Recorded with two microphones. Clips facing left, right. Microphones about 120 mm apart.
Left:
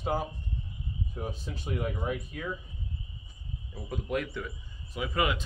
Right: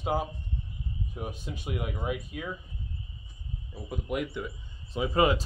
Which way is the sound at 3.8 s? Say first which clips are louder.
Even; 15° right (ahead or behind).